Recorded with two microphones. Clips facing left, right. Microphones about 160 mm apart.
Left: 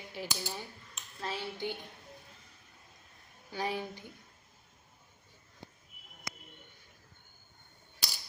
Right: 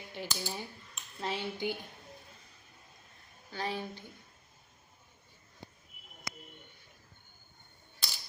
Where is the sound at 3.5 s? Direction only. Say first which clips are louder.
Left 1 dB; 15° left (ahead or behind).